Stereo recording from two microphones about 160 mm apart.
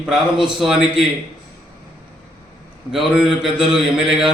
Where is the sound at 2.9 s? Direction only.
Centre (ahead or behind).